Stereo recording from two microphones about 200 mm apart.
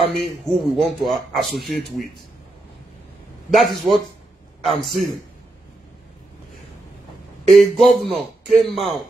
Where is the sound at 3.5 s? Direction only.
Centre (ahead or behind).